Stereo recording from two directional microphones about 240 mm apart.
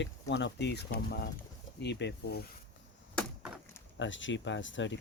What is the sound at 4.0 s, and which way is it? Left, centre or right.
Speech, left.